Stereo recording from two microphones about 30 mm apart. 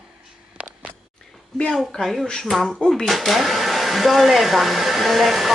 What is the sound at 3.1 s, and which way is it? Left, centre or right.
Hair dryer, centre.